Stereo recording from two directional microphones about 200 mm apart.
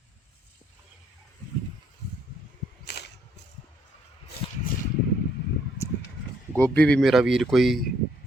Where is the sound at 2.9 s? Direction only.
60° left (ahead or behind).